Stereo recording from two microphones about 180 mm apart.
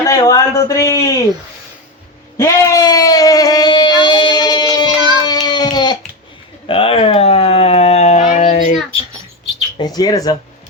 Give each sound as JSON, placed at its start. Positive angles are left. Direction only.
{"t": 0.0, "sound": "a man's voice", "side_deg": 20}
{"t": 2.4, "sound": "child singing", "side_deg": 15}
{"t": 6.7, "sound": "a sound", "side_deg": 30}
{"t": 9.7, "sound": "speech", "side_deg": 20}